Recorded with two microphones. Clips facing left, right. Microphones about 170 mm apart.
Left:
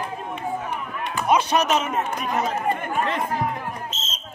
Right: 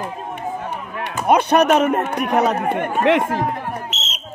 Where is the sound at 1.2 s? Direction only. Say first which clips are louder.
Right 5 dB; 60° right (ahead or behind); by 3.4 s 75° right (ahead or behind).